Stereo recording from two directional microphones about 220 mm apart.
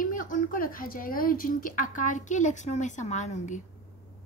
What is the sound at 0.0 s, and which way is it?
Speech, 40° left (ahead or behind).